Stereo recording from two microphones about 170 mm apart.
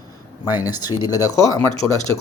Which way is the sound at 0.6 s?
25° left (ahead or behind).